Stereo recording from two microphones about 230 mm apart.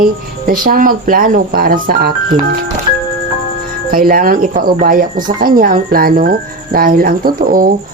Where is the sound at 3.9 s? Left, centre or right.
Right.